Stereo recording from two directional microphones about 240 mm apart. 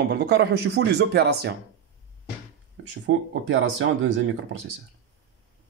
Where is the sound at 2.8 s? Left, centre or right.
Right.